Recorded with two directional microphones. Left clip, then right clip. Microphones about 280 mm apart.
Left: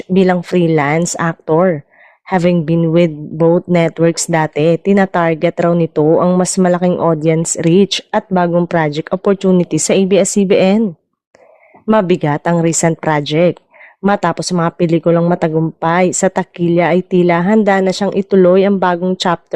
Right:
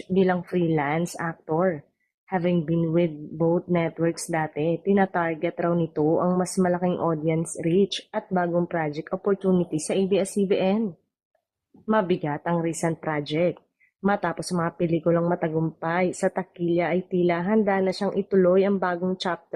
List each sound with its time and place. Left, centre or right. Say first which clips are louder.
0.1 s speech: left 10 dB; left
11.9 s speech: left 11 dB; left